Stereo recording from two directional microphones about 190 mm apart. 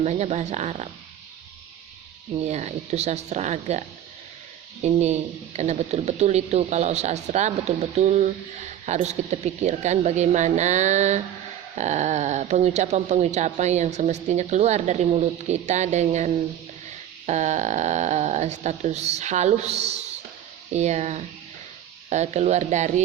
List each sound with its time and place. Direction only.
0.0 s speech: 35° right (ahead or behind)
2.4 s speech: 35° right (ahead or behind)